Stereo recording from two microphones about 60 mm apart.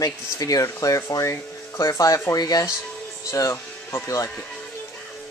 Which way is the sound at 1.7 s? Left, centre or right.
Left.